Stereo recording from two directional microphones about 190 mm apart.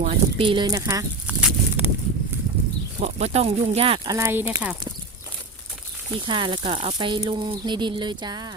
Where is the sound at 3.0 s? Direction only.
35° right (ahead or behind).